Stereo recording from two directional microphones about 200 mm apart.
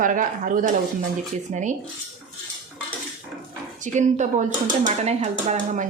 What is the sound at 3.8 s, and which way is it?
Speech, 35° right (ahead or behind).